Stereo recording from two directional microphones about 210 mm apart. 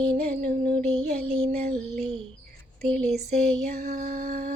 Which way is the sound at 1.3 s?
30° right (ahead or behind).